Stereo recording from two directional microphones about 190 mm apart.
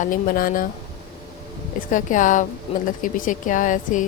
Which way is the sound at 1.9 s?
40° left (ahead or behind).